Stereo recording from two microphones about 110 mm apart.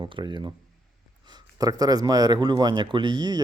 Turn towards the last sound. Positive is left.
turn(degrees=-40)  # may be behind; listen again after turning